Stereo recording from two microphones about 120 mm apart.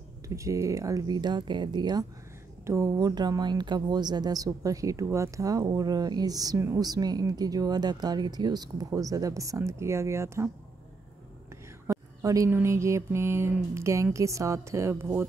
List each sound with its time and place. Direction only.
0.3 s speech: 25° right (ahead or behind)
2.6 s speech: 25° right (ahead or behind)
11.9 s a sound: 25° right (ahead or behind)